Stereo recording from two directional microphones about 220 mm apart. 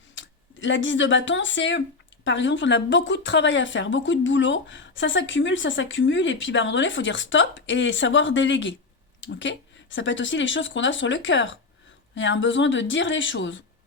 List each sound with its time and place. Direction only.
0.1 s speech: 55° left (ahead or behind)